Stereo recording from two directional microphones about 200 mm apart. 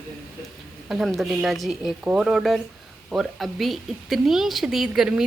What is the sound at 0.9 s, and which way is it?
A woman's voice, centre (ahead or behind).